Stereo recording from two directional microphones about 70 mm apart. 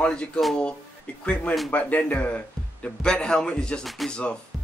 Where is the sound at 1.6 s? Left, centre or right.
Centre.